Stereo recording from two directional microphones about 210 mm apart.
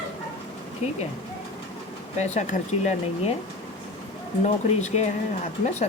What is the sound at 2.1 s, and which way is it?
Speech, 35° left (ahead or behind).